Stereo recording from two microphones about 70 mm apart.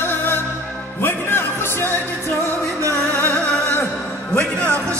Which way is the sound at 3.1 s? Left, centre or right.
Left.